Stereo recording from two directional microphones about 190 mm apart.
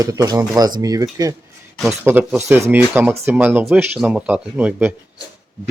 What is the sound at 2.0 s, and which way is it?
Speech, 10° right (ahead or behind).